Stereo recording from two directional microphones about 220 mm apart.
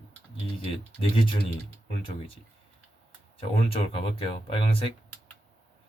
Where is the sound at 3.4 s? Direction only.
25° left (ahead or behind).